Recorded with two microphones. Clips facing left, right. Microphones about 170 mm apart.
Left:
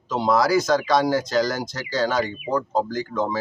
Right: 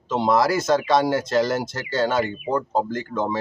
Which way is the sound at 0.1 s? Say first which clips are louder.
Even; centre (ahead or behind).